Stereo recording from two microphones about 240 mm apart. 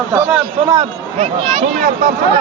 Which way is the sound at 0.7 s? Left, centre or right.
Right.